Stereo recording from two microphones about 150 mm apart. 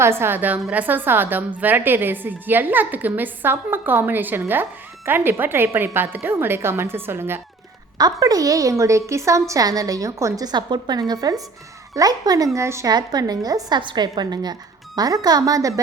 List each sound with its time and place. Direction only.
0.0 s a woman's voice: 15° right (ahead or behind)
7.9 s a woman's voice: 25° right (ahead or behind)